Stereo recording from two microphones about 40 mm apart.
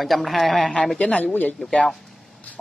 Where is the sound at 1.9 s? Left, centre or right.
Centre.